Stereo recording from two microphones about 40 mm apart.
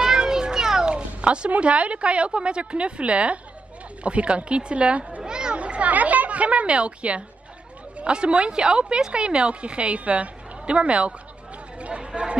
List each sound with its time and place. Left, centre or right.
0.0 s children playing: centre
0.8 s cat: right
1.6 s a woman's voice: right
5.2 s children playing: centre
5.6 s a woman's voice: right
11.8 s a sound: right
12.1 s speech: right